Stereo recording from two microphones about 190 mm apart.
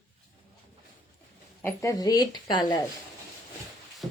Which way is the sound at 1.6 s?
15° left (ahead or behind).